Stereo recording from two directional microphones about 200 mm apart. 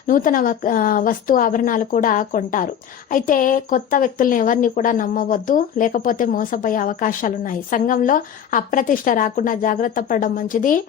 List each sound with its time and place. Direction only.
0.1 s speech: 45° left (ahead or behind)